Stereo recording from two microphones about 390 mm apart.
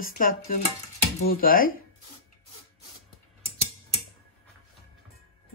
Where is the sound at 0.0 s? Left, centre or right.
Left.